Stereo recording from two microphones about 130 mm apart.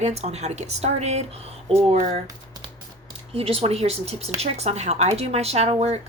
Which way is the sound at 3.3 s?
50° right (ahead or behind).